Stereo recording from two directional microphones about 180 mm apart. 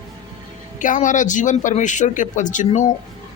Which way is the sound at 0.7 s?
45° left (ahead or behind).